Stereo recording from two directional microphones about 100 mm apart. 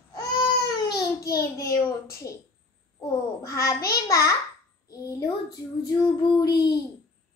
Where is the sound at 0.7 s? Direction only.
45° left (ahead or behind).